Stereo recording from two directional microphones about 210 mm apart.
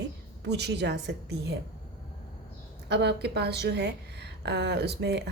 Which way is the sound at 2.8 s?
55° right (ahead or behind).